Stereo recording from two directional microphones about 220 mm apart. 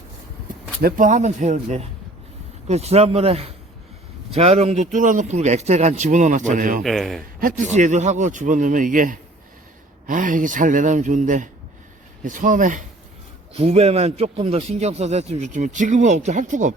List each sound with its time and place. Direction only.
0.8 s a man's voice: 40° right (ahead or behind)
6.8 s speech: centre (ahead or behind)
7.3 s a man's voice: 35° right (ahead or behind)